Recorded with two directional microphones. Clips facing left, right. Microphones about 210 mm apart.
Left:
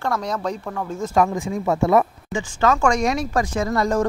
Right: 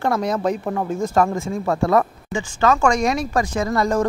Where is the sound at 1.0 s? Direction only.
5° left (ahead or behind).